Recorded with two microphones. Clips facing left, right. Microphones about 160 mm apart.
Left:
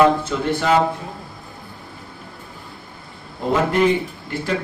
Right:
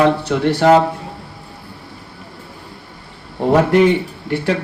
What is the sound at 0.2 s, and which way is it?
Speech, 75° right (ahead or behind).